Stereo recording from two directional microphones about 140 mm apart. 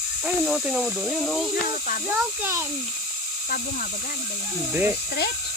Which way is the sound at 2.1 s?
15° right (ahead or behind).